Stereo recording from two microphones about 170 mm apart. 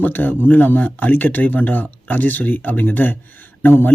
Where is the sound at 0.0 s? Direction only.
10° left (ahead or behind).